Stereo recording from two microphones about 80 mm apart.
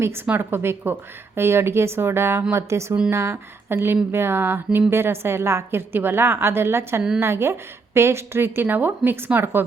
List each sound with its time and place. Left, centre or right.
0.3 s a woman's voice: right